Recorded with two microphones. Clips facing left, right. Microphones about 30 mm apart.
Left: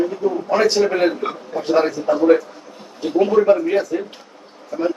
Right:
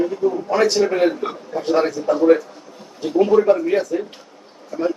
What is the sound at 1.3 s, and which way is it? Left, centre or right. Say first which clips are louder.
A man's voice: left 1 dB; centre.